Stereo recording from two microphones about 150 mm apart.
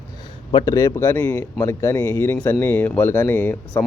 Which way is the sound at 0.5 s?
20° left (ahead or behind).